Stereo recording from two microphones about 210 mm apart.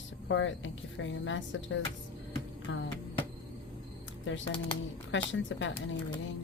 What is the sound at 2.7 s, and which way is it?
Music, 65° left (ahead or behind).